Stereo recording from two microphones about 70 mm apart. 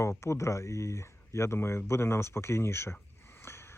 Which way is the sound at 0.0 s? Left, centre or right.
Left.